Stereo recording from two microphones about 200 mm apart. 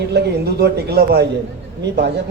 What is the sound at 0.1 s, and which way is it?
Speech, 55° right (ahead or behind).